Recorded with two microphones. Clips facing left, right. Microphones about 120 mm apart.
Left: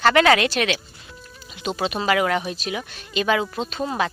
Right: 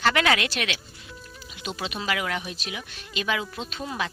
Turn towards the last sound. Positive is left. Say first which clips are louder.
# left 7 dB
turn(degrees=40)  # may be behind; listen again after turning